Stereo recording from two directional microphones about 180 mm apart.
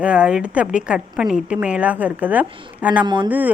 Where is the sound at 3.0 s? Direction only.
25° right (ahead or behind).